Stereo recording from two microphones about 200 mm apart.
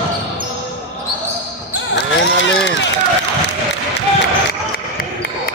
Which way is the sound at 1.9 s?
60° left (ahead or behind).